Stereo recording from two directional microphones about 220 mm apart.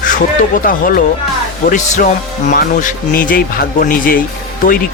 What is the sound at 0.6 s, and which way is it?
Speech, 40° left (ahead or behind).